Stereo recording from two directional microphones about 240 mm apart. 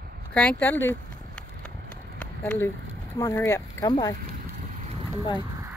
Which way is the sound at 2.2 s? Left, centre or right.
Centre.